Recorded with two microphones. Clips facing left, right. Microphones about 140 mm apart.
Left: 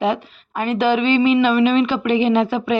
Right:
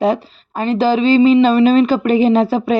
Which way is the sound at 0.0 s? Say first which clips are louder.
Right 4 dB; 35° right (ahead or behind).